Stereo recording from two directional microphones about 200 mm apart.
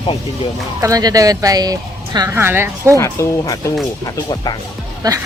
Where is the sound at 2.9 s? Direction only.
15° left (ahead or behind).